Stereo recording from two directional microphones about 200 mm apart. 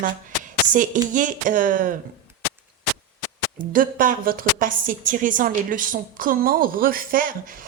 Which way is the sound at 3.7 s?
45° right (ahead or behind).